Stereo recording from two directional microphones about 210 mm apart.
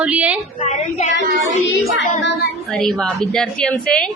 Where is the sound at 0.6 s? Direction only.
30° left (ahead or behind).